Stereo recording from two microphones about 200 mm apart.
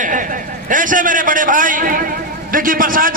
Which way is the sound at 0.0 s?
40° right (ahead or behind).